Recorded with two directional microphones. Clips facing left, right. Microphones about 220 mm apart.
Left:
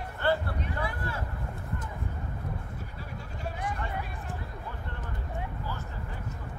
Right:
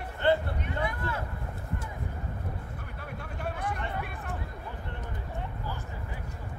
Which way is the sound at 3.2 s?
60° right (ahead or behind).